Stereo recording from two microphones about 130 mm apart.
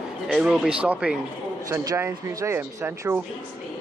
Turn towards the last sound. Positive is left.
turn(degrees=-20)  # may be behind; listen again after turning